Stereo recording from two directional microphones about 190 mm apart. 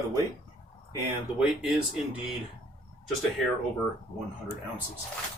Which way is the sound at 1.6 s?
5° right (ahead or behind).